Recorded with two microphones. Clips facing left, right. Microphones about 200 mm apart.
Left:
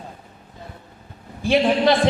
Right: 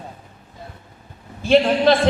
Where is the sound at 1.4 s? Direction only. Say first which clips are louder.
Right 2 dB; 15° left (ahead or behind).